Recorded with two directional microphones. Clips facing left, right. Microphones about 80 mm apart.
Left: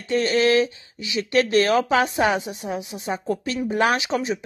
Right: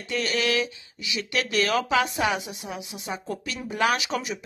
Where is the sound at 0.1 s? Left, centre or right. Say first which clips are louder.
Left 7 dB; left.